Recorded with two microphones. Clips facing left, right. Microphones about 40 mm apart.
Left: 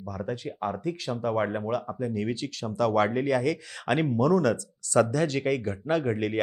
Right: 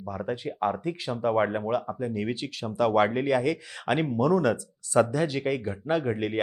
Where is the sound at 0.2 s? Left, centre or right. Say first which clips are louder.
Right 3 dB; centre.